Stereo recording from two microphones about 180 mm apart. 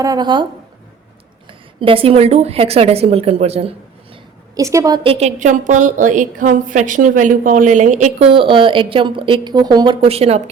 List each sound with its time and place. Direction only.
0.0 s a woman's voice: 20° right (ahead or behind)
1.5 s a woman's voice: 30° right (ahead or behind)
4.1 s a sound: 20° right (ahead or behind)
5.0 s a woman's voice: 35° right (ahead or behind)